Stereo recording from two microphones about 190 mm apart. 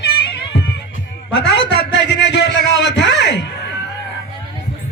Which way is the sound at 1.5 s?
65° left (ahead or behind).